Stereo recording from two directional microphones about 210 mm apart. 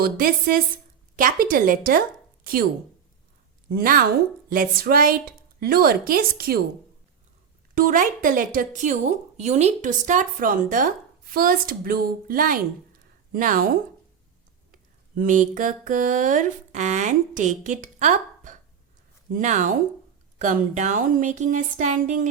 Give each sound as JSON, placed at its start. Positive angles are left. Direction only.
{"t": 0.0, "sound": "a woman's voice", "side_deg": -45}
{"t": 3.7, "sound": "a woman's voice", "side_deg": -45}
{"t": 7.8, "sound": "a woman's voice", "side_deg": -40}